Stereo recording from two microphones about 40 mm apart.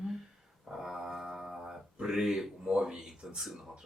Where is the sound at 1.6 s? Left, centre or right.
Centre.